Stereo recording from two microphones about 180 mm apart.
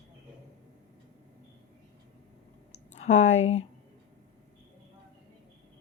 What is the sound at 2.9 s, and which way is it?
Speech, 40° left (ahead or behind).